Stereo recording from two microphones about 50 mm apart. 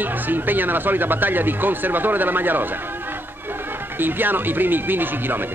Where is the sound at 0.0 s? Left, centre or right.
Right.